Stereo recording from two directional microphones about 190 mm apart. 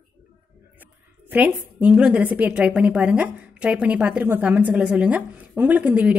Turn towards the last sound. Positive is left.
turn(degrees=-10)  # may be behind; listen again after turning